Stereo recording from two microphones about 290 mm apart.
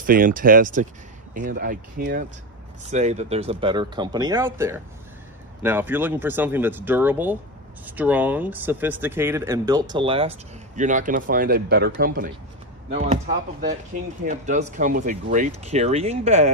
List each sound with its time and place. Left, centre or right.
0.0 s speech: right